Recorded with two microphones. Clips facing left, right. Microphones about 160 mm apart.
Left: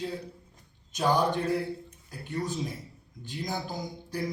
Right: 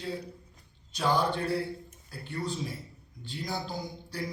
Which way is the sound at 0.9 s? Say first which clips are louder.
Left 2 dB; 15° left (ahead or behind).